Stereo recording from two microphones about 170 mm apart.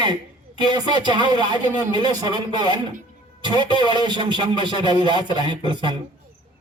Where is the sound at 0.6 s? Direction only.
25° right (ahead or behind).